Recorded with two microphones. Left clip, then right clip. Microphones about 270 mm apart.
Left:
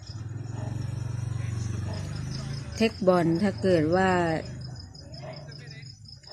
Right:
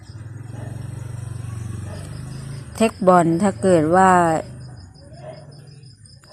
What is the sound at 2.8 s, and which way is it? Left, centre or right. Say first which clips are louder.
Speech: right 8 dB; centre.